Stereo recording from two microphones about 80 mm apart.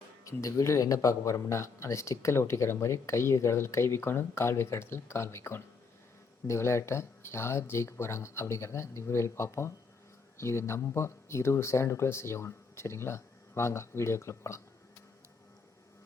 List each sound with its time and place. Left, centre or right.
0.3 s a man's voice: left